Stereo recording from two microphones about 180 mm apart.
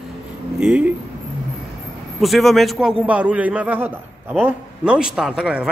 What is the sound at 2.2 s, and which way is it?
A man's voice, centre (ahead or behind).